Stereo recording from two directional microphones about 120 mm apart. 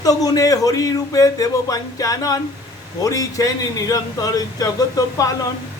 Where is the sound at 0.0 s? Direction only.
30° left (ahead or behind).